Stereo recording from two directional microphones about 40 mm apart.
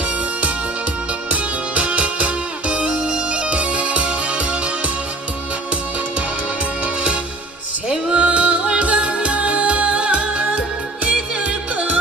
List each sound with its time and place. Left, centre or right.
1.3 s music: right
8.1 s music: right